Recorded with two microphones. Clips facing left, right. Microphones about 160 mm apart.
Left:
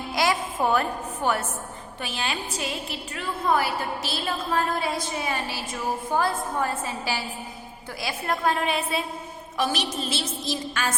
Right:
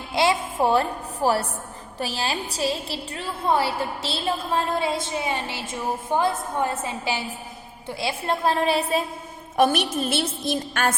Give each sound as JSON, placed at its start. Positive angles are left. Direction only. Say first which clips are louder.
{"t": 0.1, "sound": "music", "louder": "right 3 dB", "side_deg": -25}
{"t": 0.6, "sound": "a woman's voice", "louder": "right 3 dB", "side_deg": -30}
{"t": 9.6, "sound": "a woman's voice", "louder": "right 6 dB", "side_deg": -55}